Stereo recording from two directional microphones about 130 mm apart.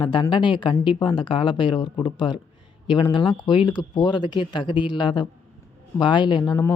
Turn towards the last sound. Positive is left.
turn(degrees=35)  # may be behind; listen again after turning